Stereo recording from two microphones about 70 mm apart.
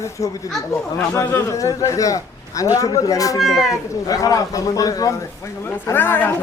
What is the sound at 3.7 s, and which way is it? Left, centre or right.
Speech, left.